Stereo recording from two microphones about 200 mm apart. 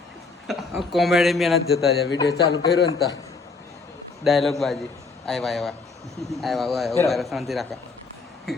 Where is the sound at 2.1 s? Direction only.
15° left (ahead or behind).